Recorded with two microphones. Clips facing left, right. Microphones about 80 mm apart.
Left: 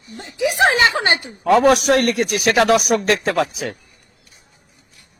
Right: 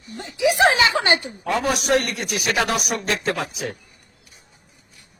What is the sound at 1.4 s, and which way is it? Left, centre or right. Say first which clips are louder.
A man's voice: left 9 dB; left.